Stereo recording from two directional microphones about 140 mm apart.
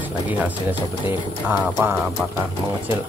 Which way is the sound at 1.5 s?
15° right (ahead or behind).